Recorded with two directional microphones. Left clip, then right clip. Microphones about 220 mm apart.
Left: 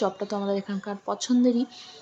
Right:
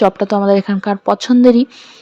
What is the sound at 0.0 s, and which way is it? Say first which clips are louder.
Speech: right 15 dB; 35° right (ahead or behind).